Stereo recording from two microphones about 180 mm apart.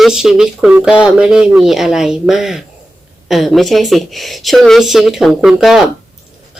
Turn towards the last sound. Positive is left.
turn(degrees=0)  # may be behind; listen again after turning